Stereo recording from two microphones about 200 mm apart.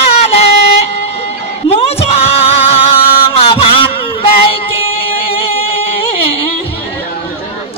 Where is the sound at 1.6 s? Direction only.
30° left (ahead or behind).